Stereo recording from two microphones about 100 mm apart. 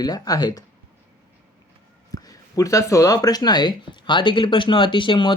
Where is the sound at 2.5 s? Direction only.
35° left (ahead or behind).